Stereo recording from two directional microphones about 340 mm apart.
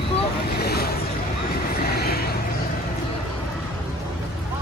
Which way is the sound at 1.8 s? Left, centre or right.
Left.